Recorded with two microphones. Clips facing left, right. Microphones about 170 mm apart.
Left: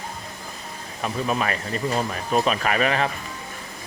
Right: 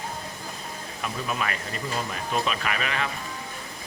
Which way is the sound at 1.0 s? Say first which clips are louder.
Left 6 dB; 40° left (ahead or behind).